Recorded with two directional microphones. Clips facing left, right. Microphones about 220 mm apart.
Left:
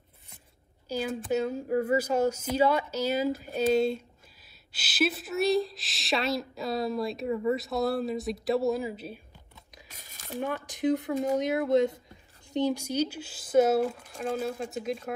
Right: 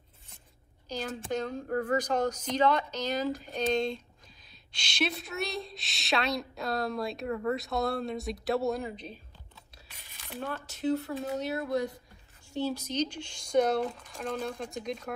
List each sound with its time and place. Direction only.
0.8 s a woman's voice: 10° left (ahead or behind)
9.8 s a sound: 45° left (ahead or behind)
10.4 s a woman's voice: 15° left (ahead or behind)